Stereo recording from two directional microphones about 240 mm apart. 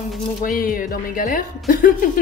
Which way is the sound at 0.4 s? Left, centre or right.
Left.